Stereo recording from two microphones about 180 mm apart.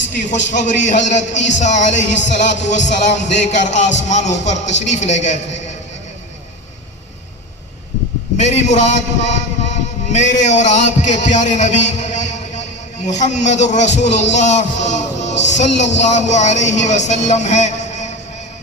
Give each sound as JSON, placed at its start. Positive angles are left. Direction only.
{"t": 0.1, "sound": "speech", "side_deg": 45}
{"t": 8.4, "sound": "a man's voice", "side_deg": 40}